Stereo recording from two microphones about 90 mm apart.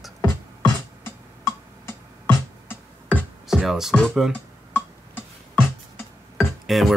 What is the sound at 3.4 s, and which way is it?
Music, 5° right (ahead or behind).